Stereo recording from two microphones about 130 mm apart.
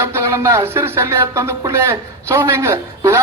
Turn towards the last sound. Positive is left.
turn(degrees=-20)  # may be behind; listen again after turning